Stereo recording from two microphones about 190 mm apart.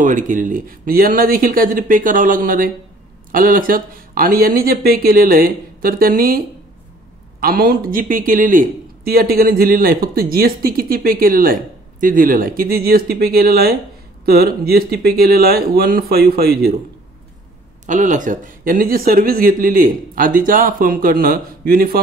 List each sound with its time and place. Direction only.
0.0 s speech: 45° right (ahead or behind)
17.8 s speech: 40° right (ahead or behind)